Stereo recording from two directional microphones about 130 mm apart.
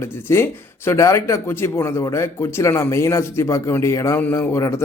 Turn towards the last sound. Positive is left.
turn(degrees=20)  # may be behind; listen again after turning